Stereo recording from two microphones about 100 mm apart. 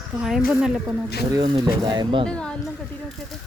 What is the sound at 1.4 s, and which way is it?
Speech, 45° right (ahead or behind).